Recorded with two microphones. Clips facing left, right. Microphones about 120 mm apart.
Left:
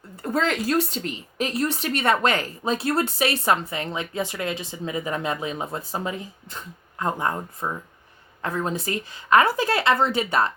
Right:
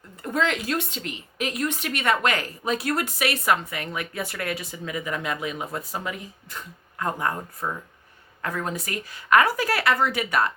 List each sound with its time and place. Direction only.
0.2 s speech: 35° left (ahead or behind)